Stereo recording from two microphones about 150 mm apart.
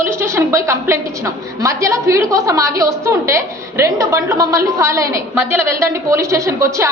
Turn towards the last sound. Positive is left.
turn(degrees=-20)  # may be behind; listen again after turning